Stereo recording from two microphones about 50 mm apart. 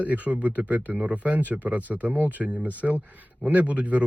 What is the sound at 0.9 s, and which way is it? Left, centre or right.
A man's voice, centre.